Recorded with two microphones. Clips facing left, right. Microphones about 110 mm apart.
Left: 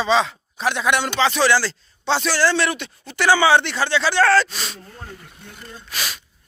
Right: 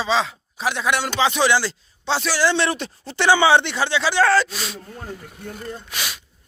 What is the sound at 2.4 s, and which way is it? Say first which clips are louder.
Speech: even; 25° right (ahead or behind).